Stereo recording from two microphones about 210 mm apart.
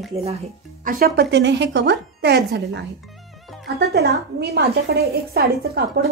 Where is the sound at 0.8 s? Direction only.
45° right (ahead or behind).